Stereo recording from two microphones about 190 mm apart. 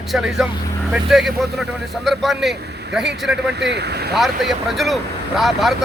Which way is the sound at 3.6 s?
65° right (ahead or behind).